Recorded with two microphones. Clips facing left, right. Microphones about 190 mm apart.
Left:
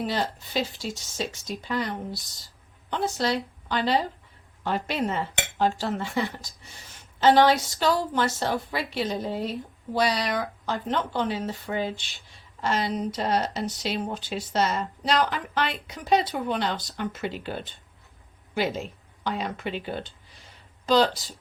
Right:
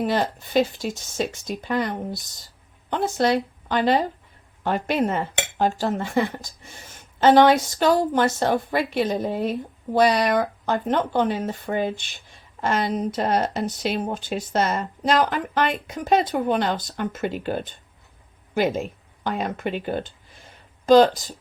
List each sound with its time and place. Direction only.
0.0 s a woman's voice: 55° right (ahead or behind)